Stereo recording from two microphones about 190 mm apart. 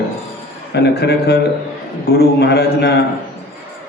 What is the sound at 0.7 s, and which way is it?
A man's voice, 60° left (ahead or behind).